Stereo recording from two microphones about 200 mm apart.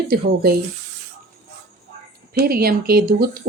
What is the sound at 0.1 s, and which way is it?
Speech, 50° right (ahead or behind).